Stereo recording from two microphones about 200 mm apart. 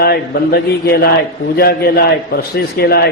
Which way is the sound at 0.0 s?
50° left (ahead or behind).